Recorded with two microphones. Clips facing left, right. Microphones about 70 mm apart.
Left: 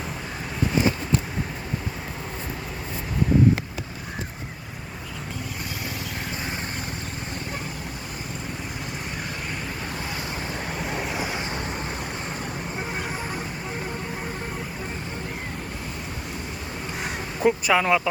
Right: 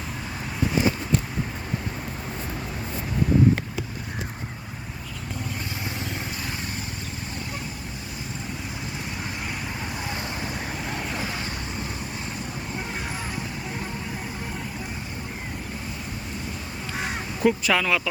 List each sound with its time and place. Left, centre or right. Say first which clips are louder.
10.7 s vehicle: left 2 dB; centre
17.4 s speech: left 1 dB; centre
17.8 s speech: left 3 dB; left